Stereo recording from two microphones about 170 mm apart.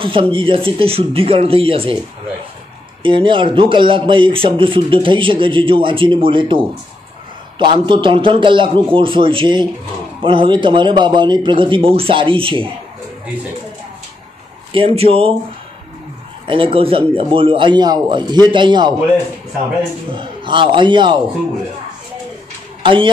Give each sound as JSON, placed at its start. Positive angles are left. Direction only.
{"t": 0.0, "sound": "a man's voice", "side_deg": -30}
{"t": 3.0, "sound": "a man's voice", "side_deg": -30}
{"t": 14.7, "sound": "a man's voice", "side_deg": -35}
{"t": 16.4, "sound": "a man's voice", "side_deg": -30}
{"t": 20.1, "sound": "a man's voice", "side_deg": -30}